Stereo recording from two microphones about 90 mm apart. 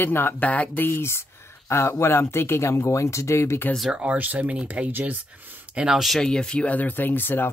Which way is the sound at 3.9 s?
15° right (ahead or behind).